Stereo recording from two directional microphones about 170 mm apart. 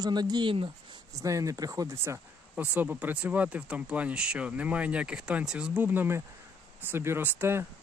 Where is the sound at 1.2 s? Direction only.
20° right (ahead or behind).